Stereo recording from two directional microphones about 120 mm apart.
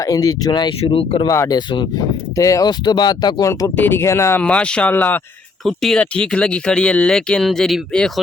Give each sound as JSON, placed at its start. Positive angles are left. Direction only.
{"t": 0.0, "sound": "speech", "side_deg": 30}
{"t": 0.8, "sound": "speech", "side_deg": 50}
{"t": 1.3, "sound": "speech", "side_deg": 30}
{"t": 2.3, "sound": "speech", "side_deg": 30}
{"t": 3.8, "sound": "speech", "side_deg": 20}
{"t": 4.4, "sound": "speech", "side_deg": 10}
{"t": 5.6, "sound": "speech", "side_deg": 5}